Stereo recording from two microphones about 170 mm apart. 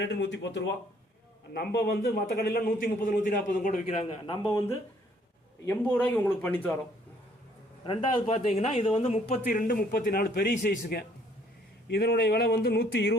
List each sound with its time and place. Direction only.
0.0 s speech: 90° left
1.5 s a man's voice: 65° left (ahead or behind); by 3.9 s 50° left (ahead or behind)
4.4 s speech: 20° left (ahead or behind)
5.6 s speech: 10° left (ahead or behind)
7.9 s speech: 40° left (ahead or behind)
9.5 s a man's voice: 55° left (ahead or behind)
11.9 s speech: 70° left (ahead or behind)